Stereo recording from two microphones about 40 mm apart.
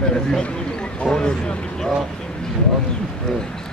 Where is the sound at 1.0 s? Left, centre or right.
Centre.